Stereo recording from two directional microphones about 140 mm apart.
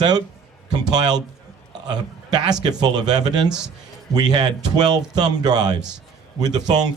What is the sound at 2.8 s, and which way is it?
Speech, 30° right (ahead or behind).